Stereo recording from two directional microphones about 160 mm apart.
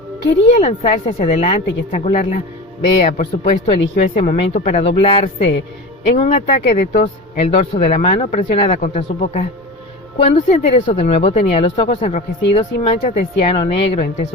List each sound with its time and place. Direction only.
0.5 s speech: 45° left (ahead or behind)